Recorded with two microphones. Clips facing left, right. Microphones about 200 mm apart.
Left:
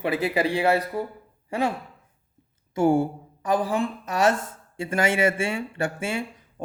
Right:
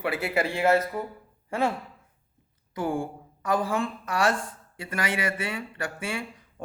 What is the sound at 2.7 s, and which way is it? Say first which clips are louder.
Speech: left 8 dB; 25° left (ahead or behind).